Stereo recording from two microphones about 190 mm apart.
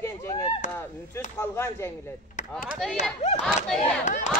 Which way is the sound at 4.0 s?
40° left (ahead or behind).